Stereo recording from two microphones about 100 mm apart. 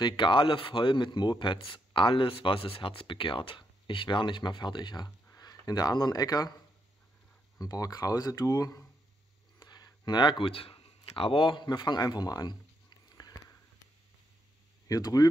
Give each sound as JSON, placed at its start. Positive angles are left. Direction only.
{"t": 0.0, "sound": "speech", "side_deg": 50}
{"t": 7.6, "sound": "speech", "side_deg": 35}
{"t": 9.6, "sound": "speech", "side_deg": 45}
{"t": 14.9, "sound": "speech", "side_deg": 40}